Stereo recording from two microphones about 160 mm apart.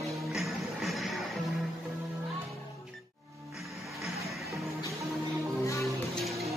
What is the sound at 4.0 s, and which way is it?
Music, centre (ahead or behind).